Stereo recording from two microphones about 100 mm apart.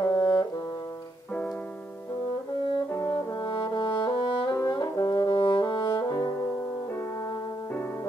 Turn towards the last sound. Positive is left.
turn(degrees=40)  # may be behind; listen again after turning